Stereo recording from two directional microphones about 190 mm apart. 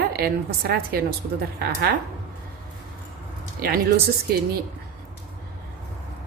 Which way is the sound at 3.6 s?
50° right (ahead or behind).